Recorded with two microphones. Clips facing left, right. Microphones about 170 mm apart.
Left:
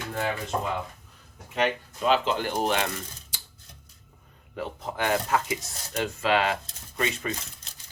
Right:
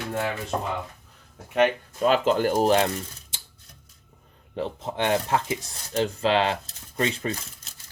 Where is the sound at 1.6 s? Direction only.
45° right (ahead or behind).